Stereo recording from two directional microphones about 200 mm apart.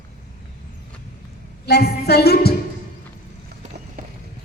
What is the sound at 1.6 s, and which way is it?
Speech, 55° left (ahead or behind).